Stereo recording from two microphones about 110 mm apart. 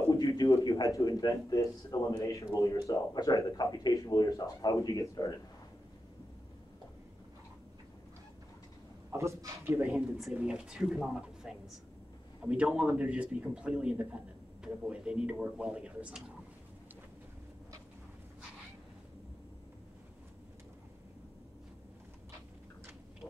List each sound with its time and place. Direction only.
0.1 s a man's voice: 30° left (ahead or behind)
9.1 s a man's voice: 25° right (ahead or behind)
10.1 s a man's voice: 5° right (ahead or behind)